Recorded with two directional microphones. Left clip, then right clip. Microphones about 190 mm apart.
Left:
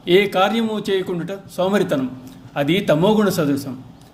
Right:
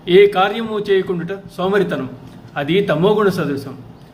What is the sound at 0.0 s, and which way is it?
A man's voice, 45° left (ahead or behind).